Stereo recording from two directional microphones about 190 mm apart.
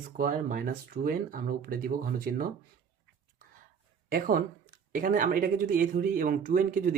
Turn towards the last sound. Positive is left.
turn(degrees=-45)  # may be behind; listen again after turning